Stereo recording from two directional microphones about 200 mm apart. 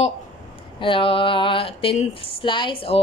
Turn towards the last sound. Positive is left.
turn(degrees=30)  # may be behind; listen again after turning